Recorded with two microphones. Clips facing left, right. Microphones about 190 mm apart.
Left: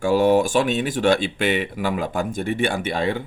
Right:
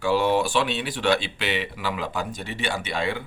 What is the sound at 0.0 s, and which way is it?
Speech, 45° left (ahead or behind).